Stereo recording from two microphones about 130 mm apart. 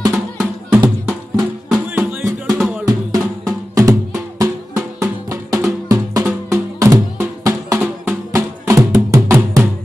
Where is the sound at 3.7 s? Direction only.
25° right (ahead or behind).